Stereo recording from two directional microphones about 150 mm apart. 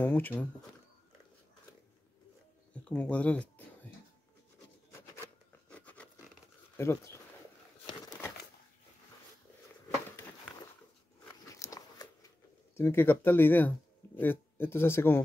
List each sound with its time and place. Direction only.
0.0 s speech: 10° left (ahead or behind)
2.7 s speech: 10° left (ahead or behind)
5.1 s zipper: 10° left (ahead or behind)
6.8 s speech: 15° left (ahead or behind)
11.6 s a sound: 25° left (ahead or behind)
12.7 s speech: 15° left (ahead or behind)